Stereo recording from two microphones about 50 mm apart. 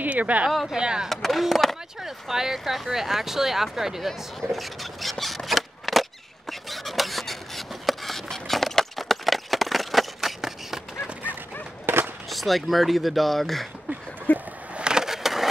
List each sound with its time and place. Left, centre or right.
0.0 s speech: right
0.5 s speech: centre
0.7 s speech: centre
1.0 s speech: centre
2.0 s speech: centre
5.2 s a sound: centre
11.8 s a sound: right
12.3 s speech: centre
14.3 s a sound: left
14.7 s skateboard: centre